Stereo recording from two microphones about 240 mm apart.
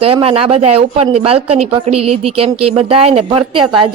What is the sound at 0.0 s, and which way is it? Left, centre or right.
Speech, right.